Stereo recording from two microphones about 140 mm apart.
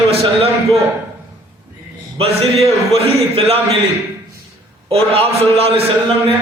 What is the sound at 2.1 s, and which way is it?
A man's voice, 45° right (ahead or behind).